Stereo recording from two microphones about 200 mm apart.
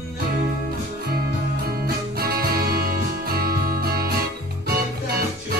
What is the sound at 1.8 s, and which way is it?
Music, 50° right (ahead or behind).